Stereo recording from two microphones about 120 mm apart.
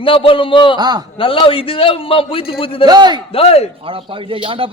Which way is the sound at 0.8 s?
35° right (ahead or behind).